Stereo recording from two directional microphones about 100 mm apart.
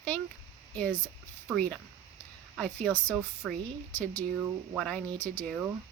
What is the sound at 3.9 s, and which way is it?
Speech, 20° left (ahead or behind).